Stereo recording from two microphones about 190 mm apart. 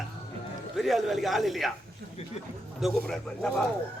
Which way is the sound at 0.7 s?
Centre (ahead or behind).